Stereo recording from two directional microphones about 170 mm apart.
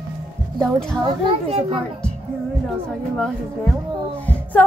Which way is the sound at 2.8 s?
Centre (ahead or behind).